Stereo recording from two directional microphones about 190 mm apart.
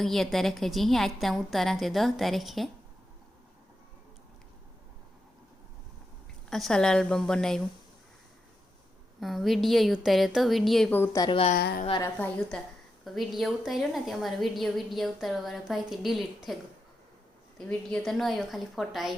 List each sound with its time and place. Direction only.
0.0 s a woman's voice: centre (ahead or behind)
6.5 s a woman's voice: centre (ahead or behind)
9.2 s a woman's voice: centre (ahead or behind)
11.3 s a woman's voice: 30° left (ahead or behind)
11.5 s a woman's voice: 55° left (ahead or behind)
11.9 s a woman's voice: 15° left (ahead or behind)
17.7 s a woman's voice: 5° left (ahead or behind)